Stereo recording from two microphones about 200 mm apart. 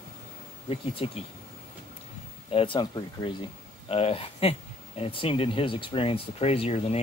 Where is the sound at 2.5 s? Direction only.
25° left (ahead or behind).